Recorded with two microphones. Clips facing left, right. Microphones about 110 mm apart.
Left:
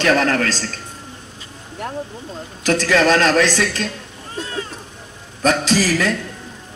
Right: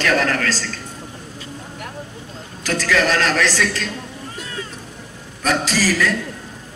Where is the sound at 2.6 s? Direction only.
20° left (ahead or behind).